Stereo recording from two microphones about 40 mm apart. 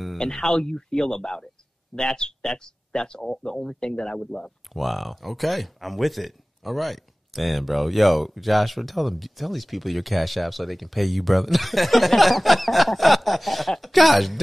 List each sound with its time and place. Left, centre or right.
0.2 s speech: centre
4.7 s speech: centre